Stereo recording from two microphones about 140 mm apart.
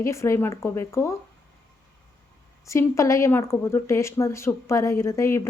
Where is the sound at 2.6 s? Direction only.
20° left (ahead or behind).